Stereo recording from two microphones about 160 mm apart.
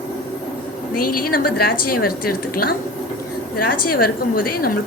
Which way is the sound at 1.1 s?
65° left (ahead or behind).